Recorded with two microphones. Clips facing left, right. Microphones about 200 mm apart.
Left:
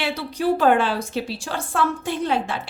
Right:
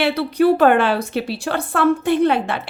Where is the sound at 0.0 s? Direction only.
60° right (ahead or behind).